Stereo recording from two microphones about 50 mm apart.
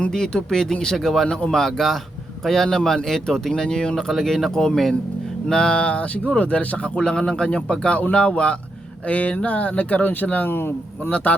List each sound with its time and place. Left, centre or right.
0.1 s speech: centre
9.0 s speech: left
10.5 s speech: left
11.1 s speech: left